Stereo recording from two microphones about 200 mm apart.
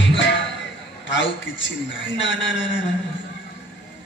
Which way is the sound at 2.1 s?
65° left (ahead or behind).